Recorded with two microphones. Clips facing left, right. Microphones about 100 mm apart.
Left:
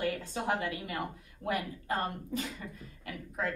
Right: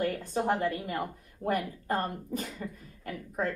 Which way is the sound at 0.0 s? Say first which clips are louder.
Right 4 dB; 45° right (ahead or behind).